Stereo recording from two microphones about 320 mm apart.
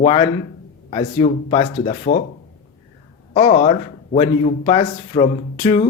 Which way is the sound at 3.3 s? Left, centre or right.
Left.